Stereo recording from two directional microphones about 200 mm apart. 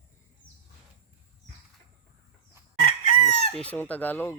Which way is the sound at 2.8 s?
40° left (ahead or behind).